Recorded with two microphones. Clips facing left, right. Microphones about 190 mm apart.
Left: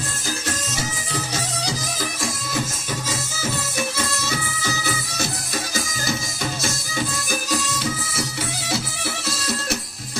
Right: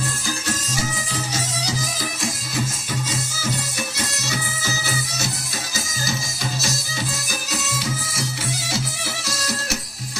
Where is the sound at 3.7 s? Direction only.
55° left (ahead or behind).